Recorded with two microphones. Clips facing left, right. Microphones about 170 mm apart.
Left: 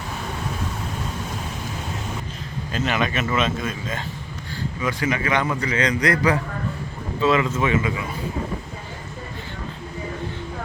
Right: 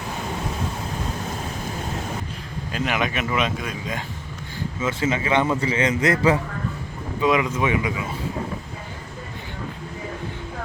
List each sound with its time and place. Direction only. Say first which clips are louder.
2.7 s speech: left 1 dB; 15° right (ahead or behind)
4.8 s a man's voice: right 1 dB; 25° right (ahead or behind)